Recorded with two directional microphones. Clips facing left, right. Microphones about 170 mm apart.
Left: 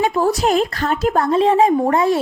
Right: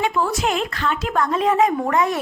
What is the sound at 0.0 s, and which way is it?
Speech, 40° left (ahead or behind).